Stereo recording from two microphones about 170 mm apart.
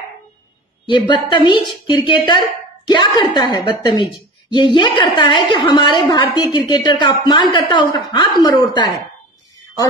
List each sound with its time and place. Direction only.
0.8 s a woman's voice: 25° left (ahead or behind)